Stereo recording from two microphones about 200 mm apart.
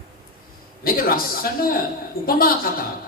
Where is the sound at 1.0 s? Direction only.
45° left (ahead or behind).